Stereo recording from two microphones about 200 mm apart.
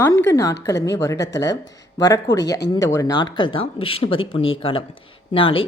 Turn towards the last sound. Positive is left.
turn(degrees=25)  # may be behind; listen again after turning